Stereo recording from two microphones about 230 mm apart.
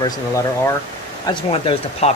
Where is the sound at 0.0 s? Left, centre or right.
Centre.